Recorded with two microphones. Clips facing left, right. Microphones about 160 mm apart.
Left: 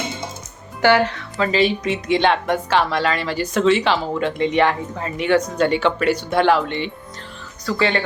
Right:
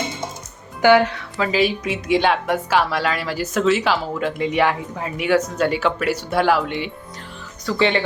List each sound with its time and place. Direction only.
0.9 s speech: 5° right (ahead or behind)